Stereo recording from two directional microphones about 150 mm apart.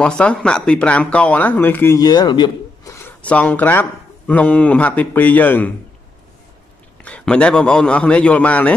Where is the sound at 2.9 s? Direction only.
10° left (ahead or behind).